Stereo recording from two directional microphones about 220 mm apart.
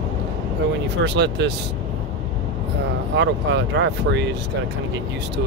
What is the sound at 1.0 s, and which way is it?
Speech, 50° right (ahead or behind).